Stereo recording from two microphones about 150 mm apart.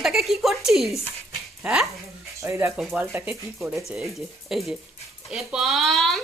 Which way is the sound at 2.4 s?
20° right (ahead or behind).